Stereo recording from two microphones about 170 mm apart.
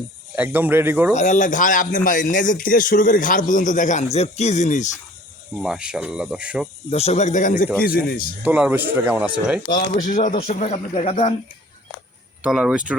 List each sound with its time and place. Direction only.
0.3 s a man's voice: 10° right (ahead or behind)
1.1 s speech: 45° left (ahead or behind)
5.6 s speech: 5° right (ahead or behind)
6.9 s speech: 40° left (ahead or behind)
7.8 s a man's voice: 60° left (ahead or behind)
8.4 s a man's voice: 10° right (ahead or behind)
9.9 s speech: 50° left (ahead or behind)
12.4 s speech: 5° right (ahead or behind)